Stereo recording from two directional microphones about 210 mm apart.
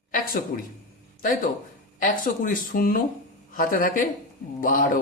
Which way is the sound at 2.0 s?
40° left (ahead or behind).